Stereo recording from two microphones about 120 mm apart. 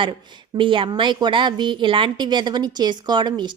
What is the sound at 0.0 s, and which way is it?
A woman's voice, 40° right (ahead or behind).